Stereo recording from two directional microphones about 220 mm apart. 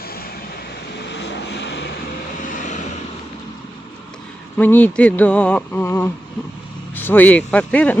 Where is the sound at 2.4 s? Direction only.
35° left (ahead or behind).